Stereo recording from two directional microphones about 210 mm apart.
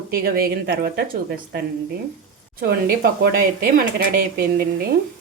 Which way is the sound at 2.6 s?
45° right (ahead or behind).